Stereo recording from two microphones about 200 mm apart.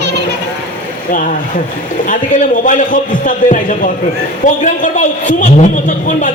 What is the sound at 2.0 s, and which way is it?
A man's voice, 40° left (ahead or behind).